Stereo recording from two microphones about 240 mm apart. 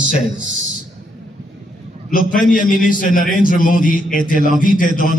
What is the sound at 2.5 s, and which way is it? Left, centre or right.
A man's voice, left.